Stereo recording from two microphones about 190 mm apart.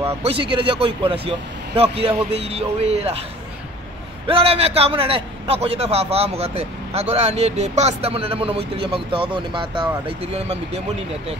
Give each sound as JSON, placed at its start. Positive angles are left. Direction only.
{"t": 0.2, "sound": "a man's voice", "side_deg": -30}
{"t": 4.3, "sound": "a man's voice", "side_deg": -30}